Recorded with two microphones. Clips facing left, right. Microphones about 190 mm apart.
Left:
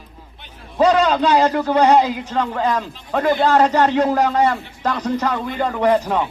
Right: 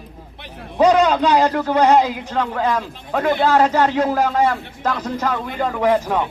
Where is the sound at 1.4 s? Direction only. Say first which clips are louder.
Left 1 dB; 5° left (ahead or behind).